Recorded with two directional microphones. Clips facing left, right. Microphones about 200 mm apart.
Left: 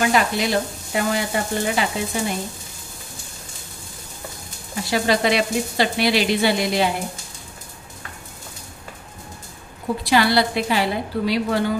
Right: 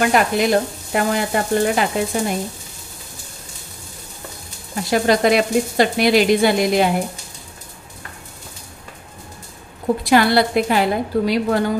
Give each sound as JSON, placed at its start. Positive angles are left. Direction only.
{"t": 0.1, "sound": "frying", "side_deg": -50}
{"t": 4.8, "sound": "frying", "side_deg": -50}
{"t": 10.0, "sound": "frying", "side_deg": -50}